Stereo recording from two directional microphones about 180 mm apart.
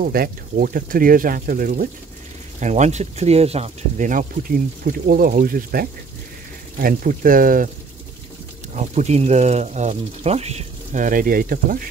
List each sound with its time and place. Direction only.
0.0 s speech: 55° right (ahead or behind)
2.6 s speech: 40° right (ahead or behind)
8.7 s speech: 40° right (ahead or behind)